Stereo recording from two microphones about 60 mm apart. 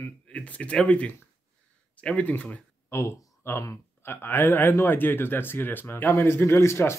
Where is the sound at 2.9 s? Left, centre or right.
Left.